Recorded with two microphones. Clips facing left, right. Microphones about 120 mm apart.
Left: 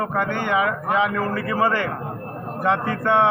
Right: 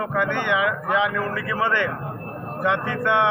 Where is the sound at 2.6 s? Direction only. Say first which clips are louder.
Left 1 dB; 35° left (ahead or behind).